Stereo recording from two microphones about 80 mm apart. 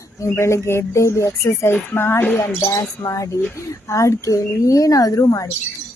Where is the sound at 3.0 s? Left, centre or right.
Left.